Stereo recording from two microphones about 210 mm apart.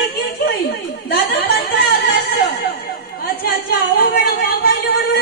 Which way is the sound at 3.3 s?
45° left (ahead or behind).